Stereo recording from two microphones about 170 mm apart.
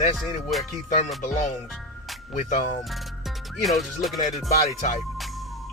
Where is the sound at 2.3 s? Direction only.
50° left (ahead or behind).